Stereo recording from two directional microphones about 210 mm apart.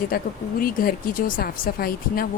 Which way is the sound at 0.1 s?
45° left (ahead or behind).